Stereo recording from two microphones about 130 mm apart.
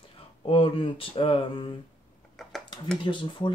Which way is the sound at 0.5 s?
45° left (ahead or behind).